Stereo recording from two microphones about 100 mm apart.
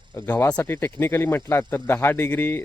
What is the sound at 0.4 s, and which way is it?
Speech, 15° left (ahead or behind).